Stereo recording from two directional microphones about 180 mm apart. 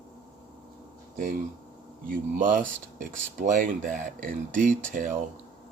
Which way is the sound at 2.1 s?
50° right (ahead or behind).